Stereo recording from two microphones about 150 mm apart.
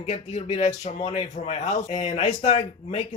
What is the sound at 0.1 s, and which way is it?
Speech, 50° left (ahead or behind).